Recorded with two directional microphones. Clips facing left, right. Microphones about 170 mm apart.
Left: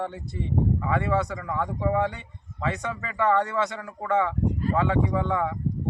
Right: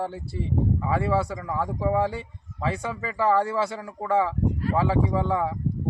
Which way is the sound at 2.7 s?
30° right (ahead or behind).